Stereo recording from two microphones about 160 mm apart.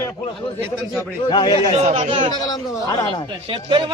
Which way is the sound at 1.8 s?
40° right (ahead or behind).